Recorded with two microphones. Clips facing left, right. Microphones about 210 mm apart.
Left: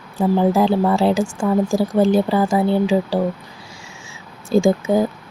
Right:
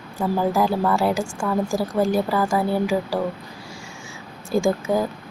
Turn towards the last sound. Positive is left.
turn(degrees=25)  # may be behind; listen again after turning